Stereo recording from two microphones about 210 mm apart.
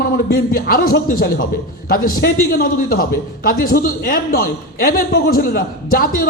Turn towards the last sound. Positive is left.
turn(degrees=45)  # may be behind; listen again after turning